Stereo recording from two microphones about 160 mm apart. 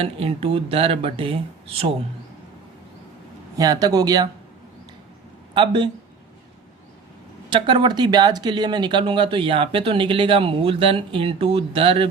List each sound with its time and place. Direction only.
0.0 s speech: 35° right (ahead or behind)
3.6 s speech: 25° right (ahead or behind)
5.5 s speech: 30° right (ahead or behind)
7.5 s speech: 30° right (ahead or behind)